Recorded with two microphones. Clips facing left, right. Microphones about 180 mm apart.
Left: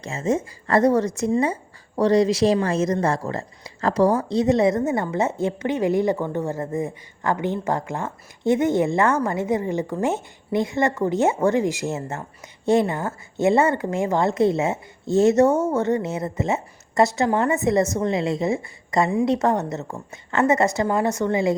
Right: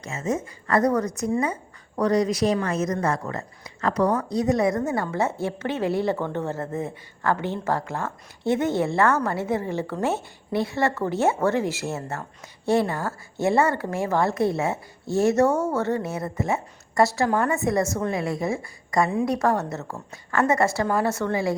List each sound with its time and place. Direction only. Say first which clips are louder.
0.0 s a woman's voice: left 4 dB; 30° left (ahead or behind)